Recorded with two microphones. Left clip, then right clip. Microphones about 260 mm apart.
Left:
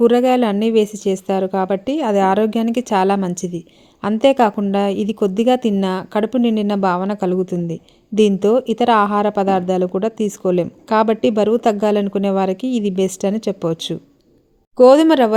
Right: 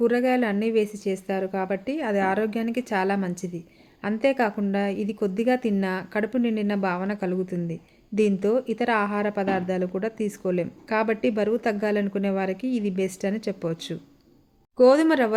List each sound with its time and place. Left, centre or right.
0.0 s a woman's voice: left